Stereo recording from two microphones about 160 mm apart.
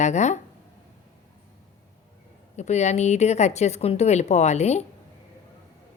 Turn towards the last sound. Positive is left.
turn(degrees=45)  # may be behind; listen again after turning